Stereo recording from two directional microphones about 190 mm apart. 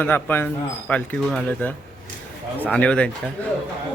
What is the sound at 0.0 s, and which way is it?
Speech, 10° left (ahead or behind).